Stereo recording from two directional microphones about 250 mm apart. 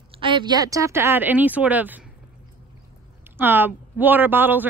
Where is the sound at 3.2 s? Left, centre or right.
Centre.